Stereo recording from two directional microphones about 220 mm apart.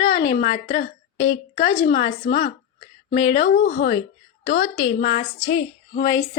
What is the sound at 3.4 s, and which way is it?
A woman's voice, 45° left (ahead or behind).